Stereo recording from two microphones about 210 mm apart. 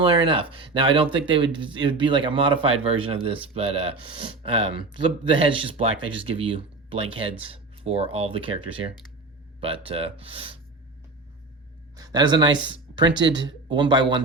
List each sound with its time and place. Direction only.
0.0 s speech: 25° right (ahead or behind)
11.9 s speech: 20° right (ahead or behind)
13.3 s speech: 60° right (ahead or behind)
13.7 s speech: 20° right (ahead or behind)